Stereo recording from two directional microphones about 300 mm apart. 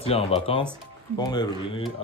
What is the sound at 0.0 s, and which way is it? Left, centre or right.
Speech, centre.